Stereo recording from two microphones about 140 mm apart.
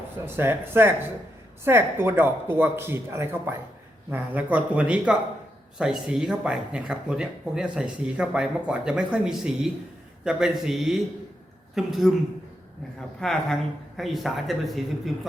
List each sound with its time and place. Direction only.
0.3 s speech: 15° right (ahead or behind)
13.1 s speech: 5° left (ahead or behind)